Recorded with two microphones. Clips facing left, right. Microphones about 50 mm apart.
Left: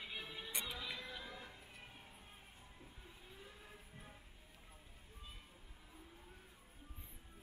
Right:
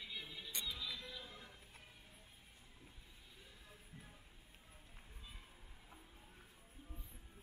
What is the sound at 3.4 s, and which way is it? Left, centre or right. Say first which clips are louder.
Music: left 3 dB; left.